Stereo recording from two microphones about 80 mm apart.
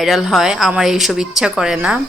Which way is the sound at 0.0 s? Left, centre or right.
Centre.